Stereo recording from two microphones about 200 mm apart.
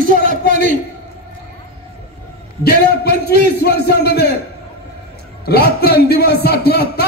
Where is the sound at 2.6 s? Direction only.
50° left (ahead or behind).